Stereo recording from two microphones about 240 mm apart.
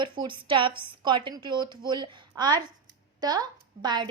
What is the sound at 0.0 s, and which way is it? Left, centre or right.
A woman's voice, centre.